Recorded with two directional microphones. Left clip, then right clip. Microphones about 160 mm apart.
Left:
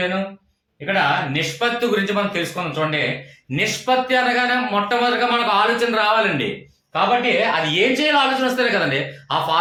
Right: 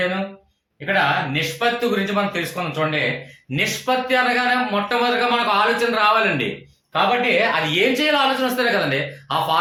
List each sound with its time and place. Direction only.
0.9 s a man's voice: 20° left (ahead or behind)